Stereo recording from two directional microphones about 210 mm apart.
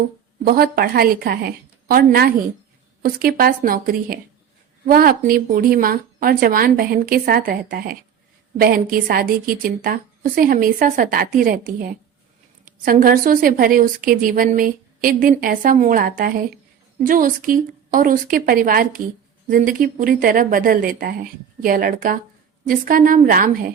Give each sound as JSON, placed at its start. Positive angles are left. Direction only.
{"t": 0.4, "sound": "a woman's voice", "side_deg": -45}